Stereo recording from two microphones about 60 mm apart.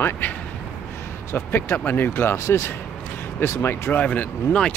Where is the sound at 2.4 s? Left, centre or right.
Left.